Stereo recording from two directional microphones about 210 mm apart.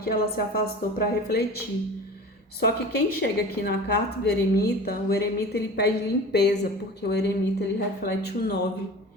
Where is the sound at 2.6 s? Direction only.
50° left (ahead or behind).